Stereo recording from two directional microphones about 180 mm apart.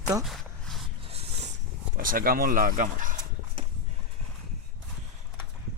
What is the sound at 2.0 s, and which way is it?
Speech, 50° right (ahead or behind).